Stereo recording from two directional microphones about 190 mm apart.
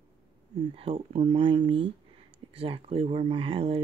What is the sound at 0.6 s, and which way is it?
Speech, 30° right (ahead or behind).